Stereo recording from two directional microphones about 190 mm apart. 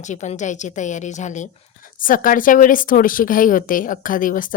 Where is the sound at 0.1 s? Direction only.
40° left (ahead or behind).